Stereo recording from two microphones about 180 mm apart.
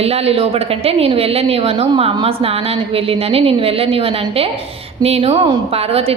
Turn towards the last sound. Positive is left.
turn(degrees=-35)  # may be behind; listen again after turning